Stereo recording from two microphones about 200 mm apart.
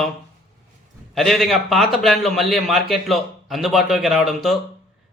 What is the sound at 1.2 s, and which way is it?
Speech, centre (ahead or behind).